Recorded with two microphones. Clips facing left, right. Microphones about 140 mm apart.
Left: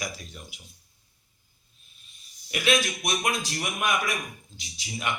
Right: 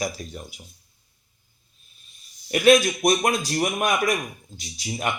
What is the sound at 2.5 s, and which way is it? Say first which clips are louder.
A man's voice: right 9 dB; 45° right (ahead or behind).